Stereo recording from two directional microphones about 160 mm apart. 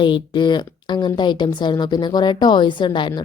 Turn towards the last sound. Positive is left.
turn(degrees=30)  # may be behind; listen again after turning